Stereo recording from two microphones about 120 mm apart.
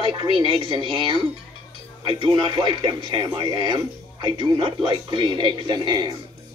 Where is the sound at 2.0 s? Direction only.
40° right (ahead or behind).